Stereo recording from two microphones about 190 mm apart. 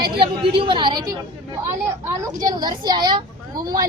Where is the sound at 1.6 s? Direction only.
15° right (ahead or behind).